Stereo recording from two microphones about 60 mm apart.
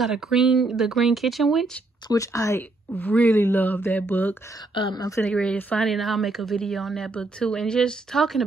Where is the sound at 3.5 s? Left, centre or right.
Left.